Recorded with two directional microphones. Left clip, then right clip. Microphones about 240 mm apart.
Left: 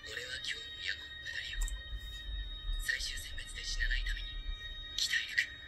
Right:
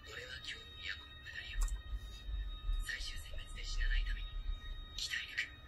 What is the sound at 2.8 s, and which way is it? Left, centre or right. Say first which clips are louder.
Music: left 7 dB; left.